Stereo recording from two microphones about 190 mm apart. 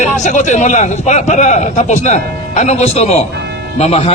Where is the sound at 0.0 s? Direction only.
40° left (ahead or behind).